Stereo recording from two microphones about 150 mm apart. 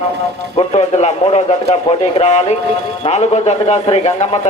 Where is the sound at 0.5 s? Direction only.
45° left (ahead or behind).